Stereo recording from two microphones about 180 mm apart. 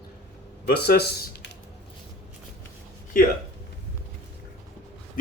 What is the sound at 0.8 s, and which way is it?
Speech, 60° left (ahead or behind).